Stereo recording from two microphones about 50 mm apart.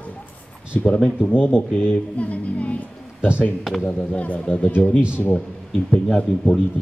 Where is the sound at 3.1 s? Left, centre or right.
Right.